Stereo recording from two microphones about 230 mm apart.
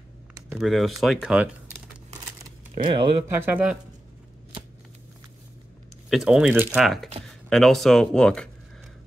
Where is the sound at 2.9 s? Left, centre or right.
Right.